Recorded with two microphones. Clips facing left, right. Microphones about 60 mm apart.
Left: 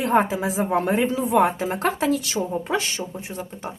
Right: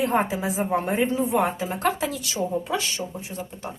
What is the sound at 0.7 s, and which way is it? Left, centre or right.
Speech, left.